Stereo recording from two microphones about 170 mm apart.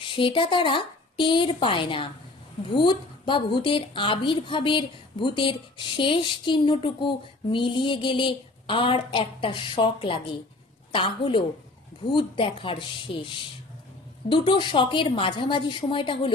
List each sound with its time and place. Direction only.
0.0 s a woman's voice: 30° left (ahead or behind)